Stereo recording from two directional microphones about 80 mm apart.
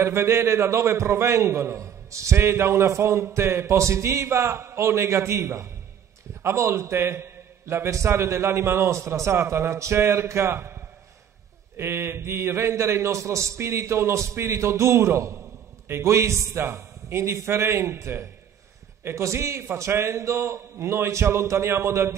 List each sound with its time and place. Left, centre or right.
0.0 s a man's voice: right